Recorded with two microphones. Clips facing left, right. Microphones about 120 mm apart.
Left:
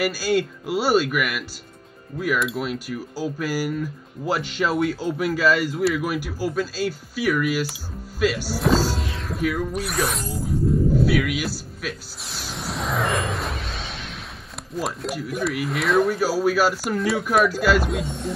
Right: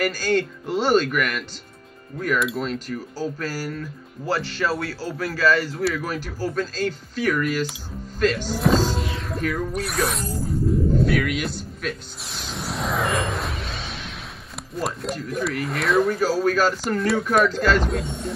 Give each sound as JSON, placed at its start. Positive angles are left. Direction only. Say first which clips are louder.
{"t": 0.0, "sound": "speech", "louder": "even", "side_deg": 10}
{"t": 11.1, "sound": "music", "louder": "left 1 dB", "side_deg": 5}
{"t": 14.8, "sound": "speech", "louder": "even", "side_deg": 0}